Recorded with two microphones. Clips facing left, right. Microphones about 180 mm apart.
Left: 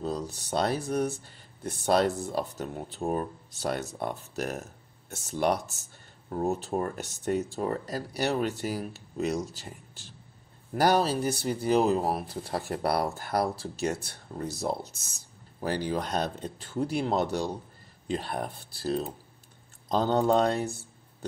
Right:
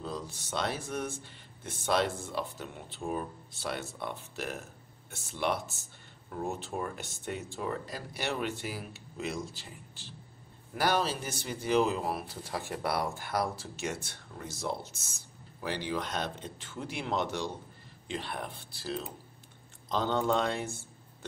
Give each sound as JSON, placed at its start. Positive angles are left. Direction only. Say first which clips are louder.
{"t": 0.0, "sound": "a man's voice", "louder": "left 6 dB", "side_deg": 40}